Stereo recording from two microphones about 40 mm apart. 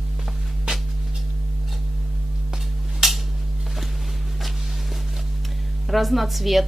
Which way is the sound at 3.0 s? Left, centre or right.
Centre.